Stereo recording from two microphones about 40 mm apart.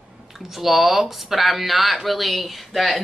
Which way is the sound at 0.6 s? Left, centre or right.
Centre.